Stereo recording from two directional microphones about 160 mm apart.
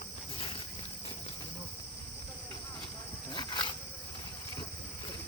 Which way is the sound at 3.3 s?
25° left (ahead or behind).